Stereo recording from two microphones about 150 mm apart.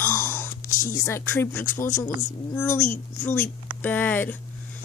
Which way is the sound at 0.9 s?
20° left (ahead or behind).